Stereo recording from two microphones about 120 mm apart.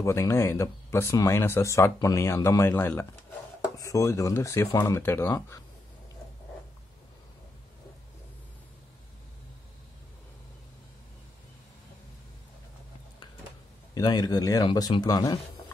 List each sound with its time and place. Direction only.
0.0 s speech: 25° left (ahead or behind)
13.9 s speech: 35° left (ahead or behind)